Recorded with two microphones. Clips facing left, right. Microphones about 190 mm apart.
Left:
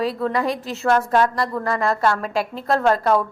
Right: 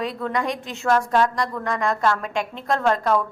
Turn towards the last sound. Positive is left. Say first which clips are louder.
# left 3 dB
turn(degrees=5)  # may be behind; listen again after turning